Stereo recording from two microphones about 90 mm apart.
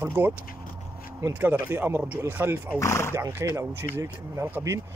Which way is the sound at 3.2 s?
30° right (ahead or behind).